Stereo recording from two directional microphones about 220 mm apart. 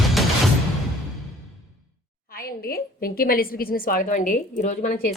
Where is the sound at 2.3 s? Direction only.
45° left (ahead or behind).